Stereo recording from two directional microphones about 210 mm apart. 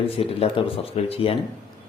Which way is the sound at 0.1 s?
25° left (ahead or behind).